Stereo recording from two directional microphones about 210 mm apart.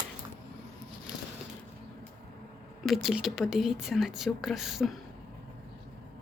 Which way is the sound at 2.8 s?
Centre (ahead or behind).